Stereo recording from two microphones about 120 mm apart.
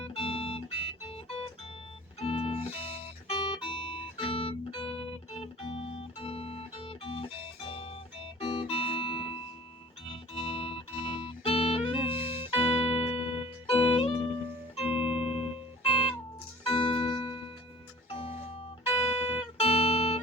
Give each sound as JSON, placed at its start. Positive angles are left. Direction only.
{"t": 0.0, "sound": "music", "side_deg": 55}
{"t": 11.9, "sound": "music", "side_deg": -15}
{"t": 12.4, "sound": "music", "side_deg": 50}
{"t": 14.9, "sound": "music", "side_deg": -5}
{"t": 15.8, "sound": "music", "side_deg": 50}